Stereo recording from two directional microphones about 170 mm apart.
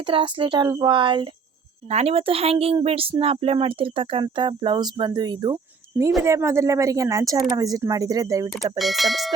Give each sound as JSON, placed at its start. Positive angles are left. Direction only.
{"t": 0.0, "sound": "speech", "side_deg": -30}
{"t": 8.8, "sound": "speech", "side_deg": 0}